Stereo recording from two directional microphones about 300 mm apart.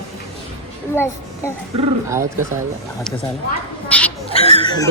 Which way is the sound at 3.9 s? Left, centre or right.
Centre.